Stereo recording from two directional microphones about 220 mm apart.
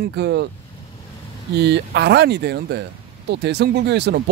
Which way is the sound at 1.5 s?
50° right (ahead or behind).